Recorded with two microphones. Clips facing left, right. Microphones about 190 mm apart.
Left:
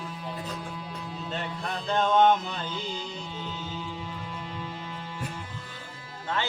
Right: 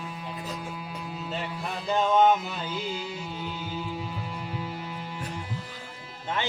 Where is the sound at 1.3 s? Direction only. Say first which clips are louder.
Left 1 dB; 5° right (ahead or behind).